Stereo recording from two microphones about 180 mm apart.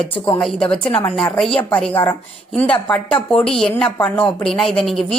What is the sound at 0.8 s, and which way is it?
Speech, 30° left (ahead or behind).